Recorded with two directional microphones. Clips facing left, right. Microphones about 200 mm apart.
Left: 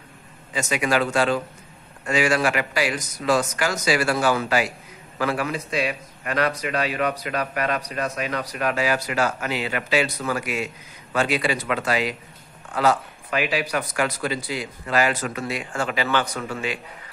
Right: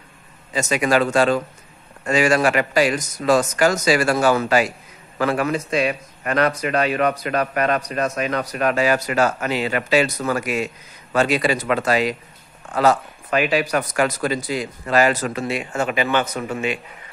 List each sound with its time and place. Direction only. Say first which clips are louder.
0.5 s a man's voice: right 4 dB; 40° right (ahead or behind); by 16.8 s 20° right (ahead or behind)